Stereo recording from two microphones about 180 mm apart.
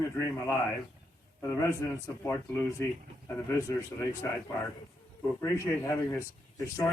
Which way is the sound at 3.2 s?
15° left (ahead or behind).